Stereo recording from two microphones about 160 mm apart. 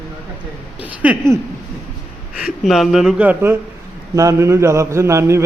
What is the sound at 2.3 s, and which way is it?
A man's voice, 5° right (ahead or behind).